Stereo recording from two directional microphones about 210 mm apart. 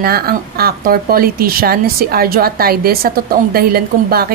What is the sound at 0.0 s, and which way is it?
A woman's voice, 45° right (ahead or behind).